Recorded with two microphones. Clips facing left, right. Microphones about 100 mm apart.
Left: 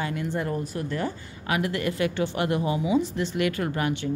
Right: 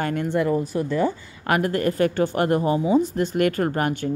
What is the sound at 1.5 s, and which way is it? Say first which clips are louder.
Speech: right 5 dB; 45° right (ahead or behind).